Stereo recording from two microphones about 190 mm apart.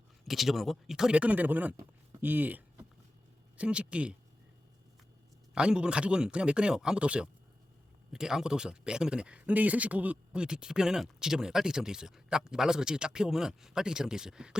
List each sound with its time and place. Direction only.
0.3 s speech: centre (ahead or behind)
5.5 s speech: 5° right (ahead or behind)